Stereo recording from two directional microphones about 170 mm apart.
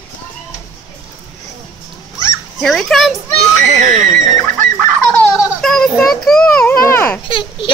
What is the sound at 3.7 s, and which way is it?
Speech, 45° right (ahead or behind).